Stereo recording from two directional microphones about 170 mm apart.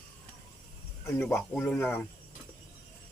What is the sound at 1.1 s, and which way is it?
Speech, 5° left (ahead or behind).